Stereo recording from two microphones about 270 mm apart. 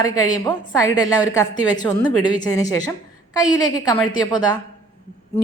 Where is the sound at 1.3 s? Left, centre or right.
Centre.